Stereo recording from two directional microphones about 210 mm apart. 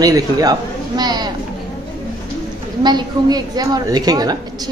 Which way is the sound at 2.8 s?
20° right (ahead or behind).